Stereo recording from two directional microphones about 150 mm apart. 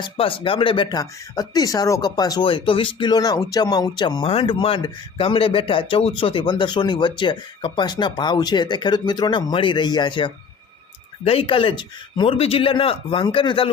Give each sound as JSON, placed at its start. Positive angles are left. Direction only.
{"t": 0.0, "sound": "speech", "side_deg": 35}